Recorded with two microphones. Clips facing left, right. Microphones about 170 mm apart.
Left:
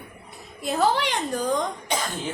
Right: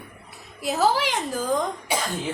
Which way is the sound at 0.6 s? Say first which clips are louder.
Right 1 dB; 5° right (ahead or behind).